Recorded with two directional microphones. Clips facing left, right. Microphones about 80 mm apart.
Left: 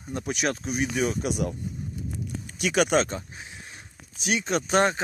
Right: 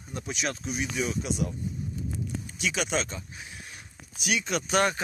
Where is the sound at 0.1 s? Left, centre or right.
Left.